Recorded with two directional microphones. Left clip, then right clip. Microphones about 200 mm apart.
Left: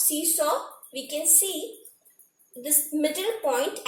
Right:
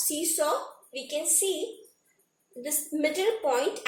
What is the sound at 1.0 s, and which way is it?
Speech, 25° right (ahead or behind).